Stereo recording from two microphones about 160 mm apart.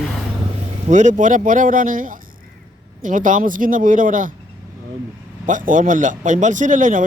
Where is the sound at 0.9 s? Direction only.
50° right (ahead or behind).